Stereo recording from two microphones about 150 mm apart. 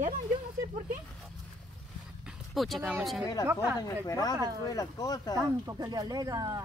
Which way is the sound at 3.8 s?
25° left (ahead or behind).